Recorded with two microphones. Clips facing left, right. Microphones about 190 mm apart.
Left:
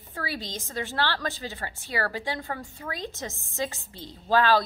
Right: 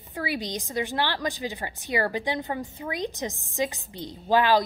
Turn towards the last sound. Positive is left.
turn(degrees=-15)  # may be behind; listen again after turning